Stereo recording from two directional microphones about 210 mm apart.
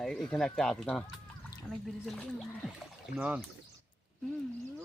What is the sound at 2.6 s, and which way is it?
Speech, centre (ahead or behind).